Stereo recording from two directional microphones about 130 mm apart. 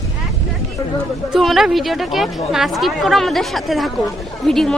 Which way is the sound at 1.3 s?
Centre (ahead or behind).